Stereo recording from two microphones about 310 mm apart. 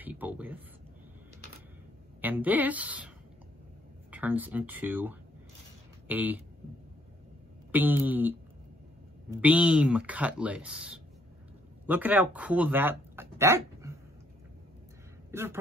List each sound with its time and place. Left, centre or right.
0.0 s a sound: centre
2.2 s a woman's voice: centre
4.1 s speech: centre
7.7 s speech: centre
15.3 s a man's voice: centre